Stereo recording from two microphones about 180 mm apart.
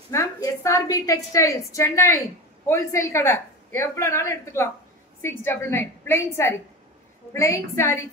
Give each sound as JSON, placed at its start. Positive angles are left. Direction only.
{"t": 0.1, "sound": "a woman's voice", "side_deg": 15}